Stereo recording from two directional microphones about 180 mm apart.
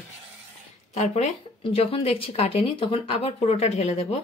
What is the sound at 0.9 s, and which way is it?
Speech, 40° left (ahead or behind).